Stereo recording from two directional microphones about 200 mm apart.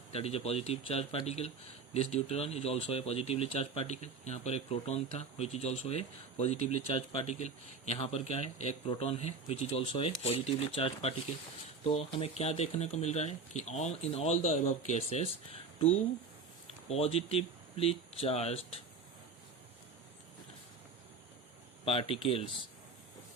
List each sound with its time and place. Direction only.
0.1 s speech: 30° left (ahead or behind)
16.9 s speech: 30° left (ahead or behind)
21.8 s speech: 30° left (ahead or behind)